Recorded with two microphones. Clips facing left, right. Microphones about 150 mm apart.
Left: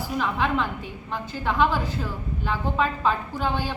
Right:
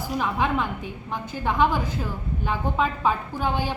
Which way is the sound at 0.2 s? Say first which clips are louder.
Even; 15° right (ahead or behind).